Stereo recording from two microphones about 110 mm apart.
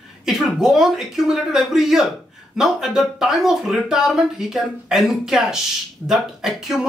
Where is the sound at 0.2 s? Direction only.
5° right (ahead or behind).